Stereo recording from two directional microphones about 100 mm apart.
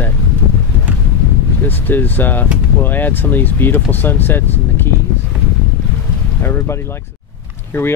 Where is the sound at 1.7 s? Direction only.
20° left (ahead or behind).